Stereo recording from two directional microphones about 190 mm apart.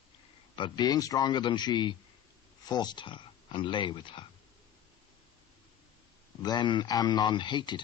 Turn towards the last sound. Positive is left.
turn(degrees=25)  # may be behind; listen again after turning